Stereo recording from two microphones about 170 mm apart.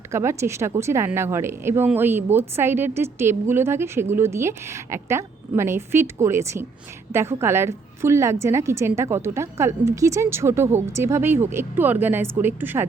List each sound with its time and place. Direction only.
0.1 s speech: 15° right (ahead or behind)